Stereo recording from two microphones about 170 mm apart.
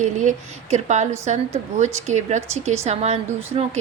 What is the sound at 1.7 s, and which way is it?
A woman's voice, 45° right (ahead or behind).